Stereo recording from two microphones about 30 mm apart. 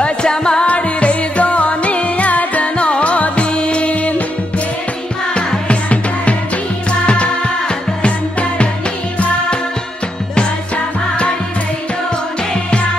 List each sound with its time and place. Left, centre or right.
0.0 s music: left
0.7 s music: left
2.8 s music: left
5.7 s music: left